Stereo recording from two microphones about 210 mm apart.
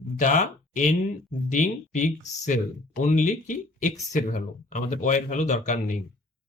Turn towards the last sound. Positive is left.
turn(degrees=35)  # may be behind; listen again after turning